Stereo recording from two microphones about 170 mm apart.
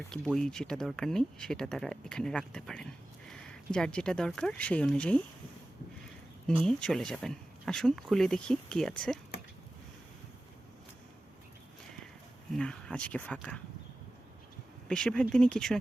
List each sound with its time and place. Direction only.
0.3 s speech: 5° left (ahead or behind)
6.5 s speech: 5° left (ahead or behind)
12.5 s speech: 5° left (ahead or behind)
14.8 s speech: 5° left (ahead or behind)